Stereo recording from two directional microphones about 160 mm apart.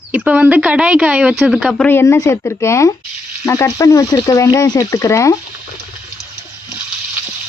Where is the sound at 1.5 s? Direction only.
5° left (ahead or behind).